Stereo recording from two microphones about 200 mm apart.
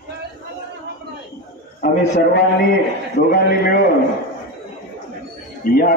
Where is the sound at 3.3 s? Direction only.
50° left (ahead or behind).